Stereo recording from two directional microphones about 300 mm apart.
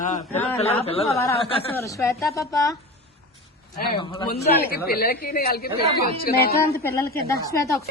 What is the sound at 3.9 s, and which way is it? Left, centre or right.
Speech, centre.